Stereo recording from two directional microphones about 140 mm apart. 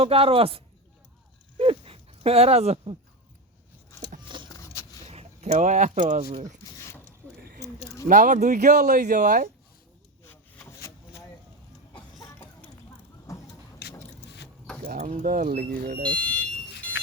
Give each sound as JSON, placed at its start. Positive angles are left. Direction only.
{"t": 0.0, "sound": "a man's voice", "side_deg": -45}
{"t": 1.5, "sound": "dog", "side_deg": -45}
{"t": 4.4, "sound": "a sound", "side_deg": 20}
{"t": 5.0, "sound": "speech", "side_deg": -50}
{"t": 6.7, "sound": "a sound", "side_deg": 20}
{"t": 8.0, "sound": "speech", "side_deg": -65}
{"t": 10.2, "sound": "wood", "side_deg": 20}
{"t": 13.3, "sound": "vehicle", "side_deg": 25}
{"t": 15.0, "sound": "speech", "side_deg": -60}
{"t": 16.1, "sound": "speech", "side_deg": 10}